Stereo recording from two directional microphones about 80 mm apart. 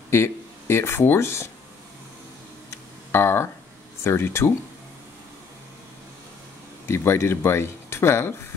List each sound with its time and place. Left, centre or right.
0.1 s speech: left
3.1 s speech: left
6.9 s speech: left